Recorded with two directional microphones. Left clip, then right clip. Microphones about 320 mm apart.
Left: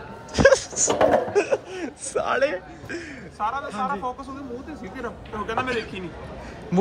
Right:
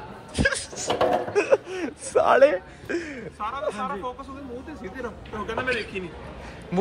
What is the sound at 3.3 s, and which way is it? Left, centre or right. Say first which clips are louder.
Speech: left 3 dB; left.